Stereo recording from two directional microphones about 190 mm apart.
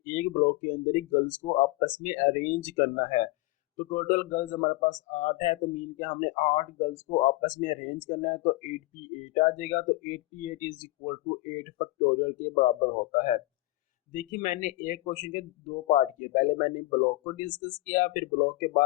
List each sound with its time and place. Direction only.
0.0 s speech: 45° left (ahead or behind)